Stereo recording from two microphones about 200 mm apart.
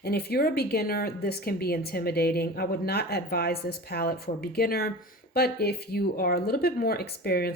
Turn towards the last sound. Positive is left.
turn(degrees=50)  # may be behind; listen again after turning